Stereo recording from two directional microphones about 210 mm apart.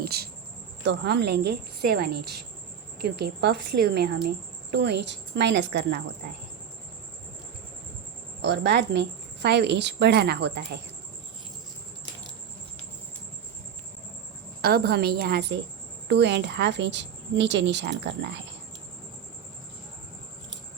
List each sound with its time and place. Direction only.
0.0 s a sound: 50° right (ahead or behind)
0.9 s a woman's voice: 55° right (ahead or behind)
8.4 s a woman's voice: 55° right (ahead or behind)
14.6 s a woman's voice: 50° right (ahead or behind)